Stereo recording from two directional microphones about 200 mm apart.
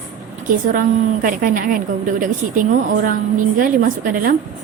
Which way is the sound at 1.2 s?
45° right (ahead or behind).